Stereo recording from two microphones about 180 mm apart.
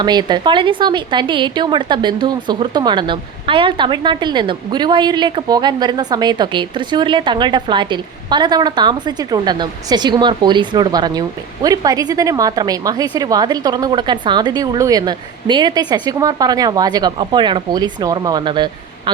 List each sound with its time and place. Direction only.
0.0 s a woman's voice: 25° right (ahead or behind)